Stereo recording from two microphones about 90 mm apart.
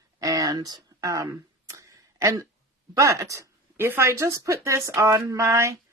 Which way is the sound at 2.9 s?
35° right (ahead or behind).